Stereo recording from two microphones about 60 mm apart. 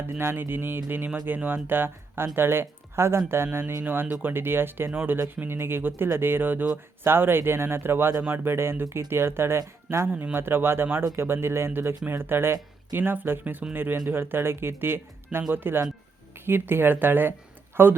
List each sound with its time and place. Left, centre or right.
0.2 s speech: right